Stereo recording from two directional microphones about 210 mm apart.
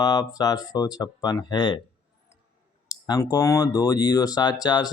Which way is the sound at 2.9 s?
15° left (ahead or behind).